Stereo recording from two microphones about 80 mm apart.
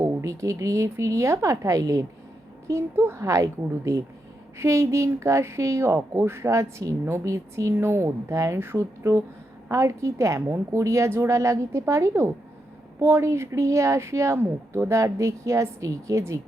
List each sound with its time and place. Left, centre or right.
0.0 s a woman's voice: right
2.6 s a woman's voice: right